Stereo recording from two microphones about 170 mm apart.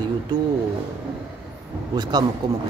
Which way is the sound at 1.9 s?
25° right (ahead or behind).